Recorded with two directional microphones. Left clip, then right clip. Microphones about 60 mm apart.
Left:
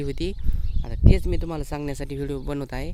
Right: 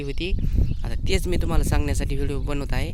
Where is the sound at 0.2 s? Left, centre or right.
Left.